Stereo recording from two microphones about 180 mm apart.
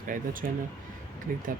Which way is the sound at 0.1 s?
50° right (ahead or behind).